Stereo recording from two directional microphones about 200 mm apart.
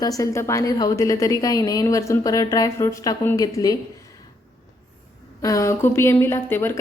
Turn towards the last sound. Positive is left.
turn(degrees=10)  # may be behind; listen again after turning